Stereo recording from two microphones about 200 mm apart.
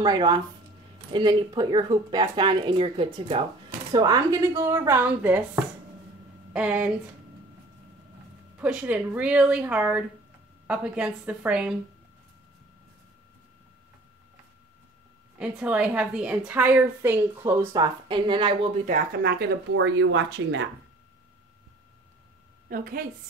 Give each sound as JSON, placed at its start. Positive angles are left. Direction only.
{"t": 0.0, "sound": "a woman's voice", "side_deg": -20}
{"t": 8.5, "sound": "a woman's voice", "side_deg": -5}
{"t": 15.3, "sound": "a woman's voice", "side_deg": -5}
{"t": 18.0, "sound": "speech", "side_deg": -25}
{"t": 18.9, "sound": "speech", "side_deg": -50}
{"t": 22.7, "sound": "a woman's voice", "side_deg": -45}